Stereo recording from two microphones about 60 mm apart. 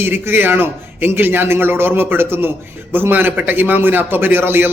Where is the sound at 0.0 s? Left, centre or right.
Right.